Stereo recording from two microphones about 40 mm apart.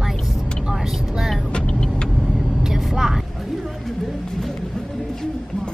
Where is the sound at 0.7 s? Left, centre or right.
Centre.